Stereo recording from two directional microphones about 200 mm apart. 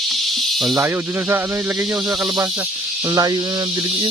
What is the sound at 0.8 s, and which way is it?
Snake, 10° right (ahead or behind).